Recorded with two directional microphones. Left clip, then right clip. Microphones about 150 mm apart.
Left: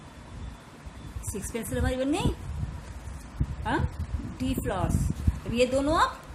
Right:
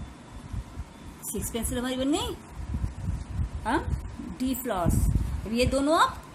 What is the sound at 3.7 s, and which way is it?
A woman's voice, 15° right (ahead or behind).